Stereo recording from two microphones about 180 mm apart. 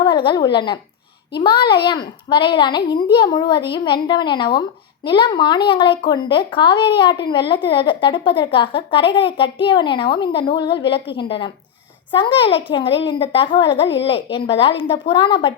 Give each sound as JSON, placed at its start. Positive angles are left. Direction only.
{"t": 0.0, "sound": "a woman's voice", "side_deg": 25}